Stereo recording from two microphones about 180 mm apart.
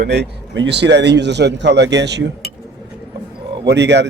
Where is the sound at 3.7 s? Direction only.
70° right (ahead or behind).